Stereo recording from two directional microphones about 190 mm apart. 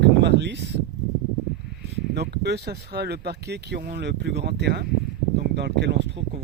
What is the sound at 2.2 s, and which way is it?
Speech, 60° right (ahead or behind).